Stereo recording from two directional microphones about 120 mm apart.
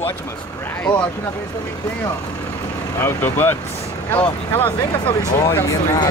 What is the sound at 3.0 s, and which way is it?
Speech, 15° left (ahead or behind).